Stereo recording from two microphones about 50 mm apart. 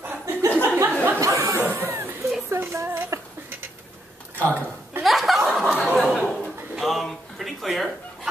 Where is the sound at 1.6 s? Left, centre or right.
Right.